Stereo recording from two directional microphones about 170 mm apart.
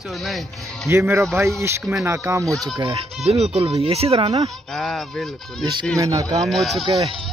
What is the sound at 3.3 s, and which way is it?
Speech, 35° right (ahead or behind).